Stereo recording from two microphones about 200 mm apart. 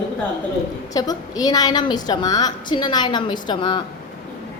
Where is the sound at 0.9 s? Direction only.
20° left (ahead or behind).